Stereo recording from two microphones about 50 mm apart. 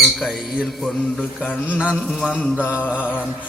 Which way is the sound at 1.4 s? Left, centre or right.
Left.